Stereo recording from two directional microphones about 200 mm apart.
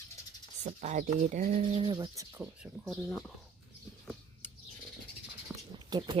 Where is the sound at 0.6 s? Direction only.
35° right (ahead or behind); by 3.0 s 5° right (ahead or behind).